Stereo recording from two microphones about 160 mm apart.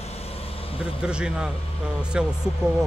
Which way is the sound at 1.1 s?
5° right (ahead or behind).